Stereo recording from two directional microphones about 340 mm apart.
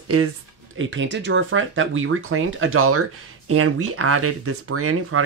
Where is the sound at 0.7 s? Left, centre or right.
Right.